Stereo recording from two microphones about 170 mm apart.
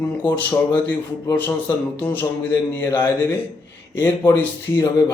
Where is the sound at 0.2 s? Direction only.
10° left (ahead or behind).